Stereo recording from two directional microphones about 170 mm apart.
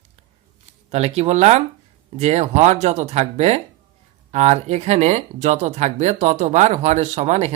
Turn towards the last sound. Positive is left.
turn(degrees=-40)  # may be behind; listen again after turning